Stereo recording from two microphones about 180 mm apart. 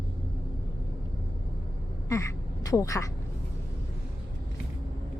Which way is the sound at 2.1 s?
15° left (ahead or behind).